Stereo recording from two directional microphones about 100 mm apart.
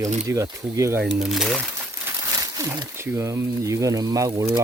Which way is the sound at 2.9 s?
25° right (ahead or behind).